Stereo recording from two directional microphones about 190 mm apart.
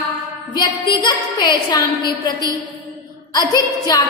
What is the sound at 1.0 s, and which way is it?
Speech, 25° left (ahead or behind).